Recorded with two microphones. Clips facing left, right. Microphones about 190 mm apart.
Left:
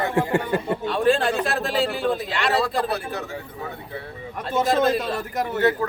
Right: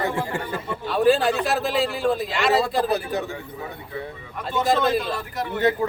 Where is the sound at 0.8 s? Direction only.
Centre (ahead or behind).